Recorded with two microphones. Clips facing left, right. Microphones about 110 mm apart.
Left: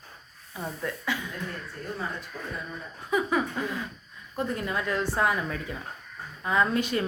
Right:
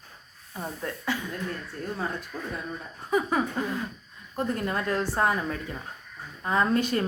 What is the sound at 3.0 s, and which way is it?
A woman's voice, 40° right (ahead or behind).